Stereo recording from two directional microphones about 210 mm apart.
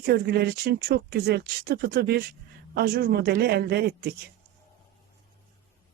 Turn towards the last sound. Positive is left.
turn(degrees=-50)  # may be behind; listen again after turning